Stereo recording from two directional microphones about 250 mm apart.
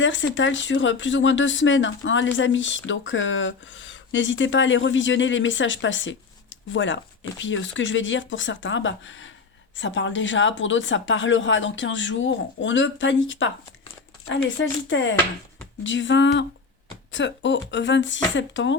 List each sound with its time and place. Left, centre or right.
0.0 s speech: left